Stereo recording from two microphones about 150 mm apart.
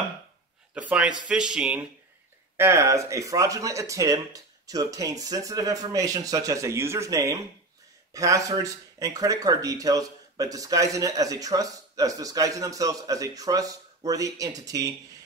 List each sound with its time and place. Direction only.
0.7 s speech: 10° right (ahead or behind)
2.5 s speech: 15° right (ahead or behind)